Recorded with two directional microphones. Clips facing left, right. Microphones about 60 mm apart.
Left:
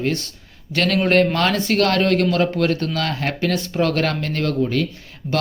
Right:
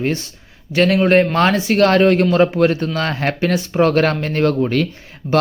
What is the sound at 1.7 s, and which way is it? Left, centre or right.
Speech, right.